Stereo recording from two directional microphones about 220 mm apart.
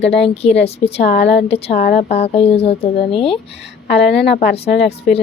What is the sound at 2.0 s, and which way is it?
Speech, 30° left (ahead or behind).